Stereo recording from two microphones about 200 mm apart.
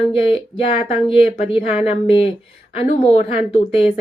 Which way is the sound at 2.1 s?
30° left (ahead or behind).